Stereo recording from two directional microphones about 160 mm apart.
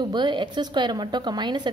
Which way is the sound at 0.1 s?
30° right (ahead or behind).